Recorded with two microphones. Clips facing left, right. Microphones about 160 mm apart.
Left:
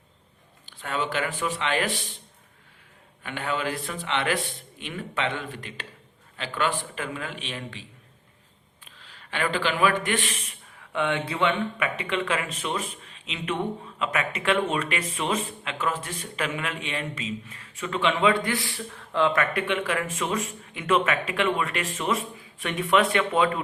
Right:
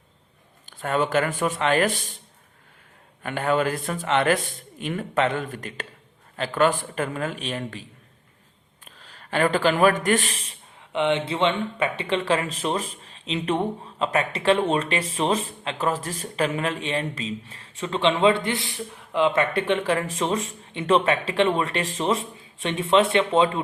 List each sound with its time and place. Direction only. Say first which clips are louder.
0.6 s speech: right 6 dB; 45° right (ahead or behind)
3.2 s a man's voice: right 6 dB; 45° right (ahead or behind); by 23.6 s 25° right (ahead or behind)